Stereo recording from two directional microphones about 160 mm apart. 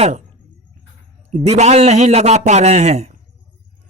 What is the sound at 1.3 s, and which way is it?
A man's voice, 45° right (ahead or behind).